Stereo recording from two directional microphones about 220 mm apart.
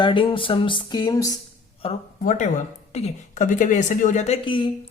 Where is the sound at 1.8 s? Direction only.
30° left (ahead or behind).